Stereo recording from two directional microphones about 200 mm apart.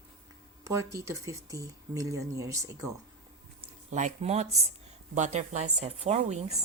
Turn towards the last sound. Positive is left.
turn(degrees=-35)  # may be behind; listen again after turning